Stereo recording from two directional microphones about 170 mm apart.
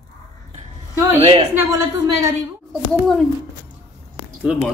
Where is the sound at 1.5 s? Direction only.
20° right (ahead or behind).